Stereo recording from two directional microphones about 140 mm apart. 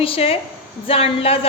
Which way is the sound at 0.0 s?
45° left (ahead or behind).